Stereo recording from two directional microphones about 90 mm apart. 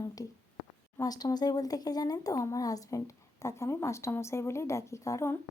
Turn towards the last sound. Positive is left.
turn(degrees=30)  # may be behind; listen again after turning